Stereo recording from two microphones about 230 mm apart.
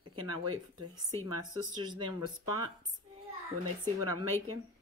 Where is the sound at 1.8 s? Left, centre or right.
Centre.